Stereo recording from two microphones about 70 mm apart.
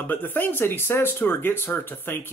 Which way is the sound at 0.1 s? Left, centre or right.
Left.